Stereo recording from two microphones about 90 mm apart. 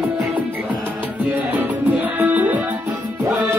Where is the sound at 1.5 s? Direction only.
20° right (ahead or behind).